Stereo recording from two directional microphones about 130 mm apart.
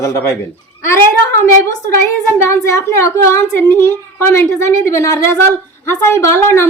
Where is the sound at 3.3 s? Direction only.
20° left (ahead or behind).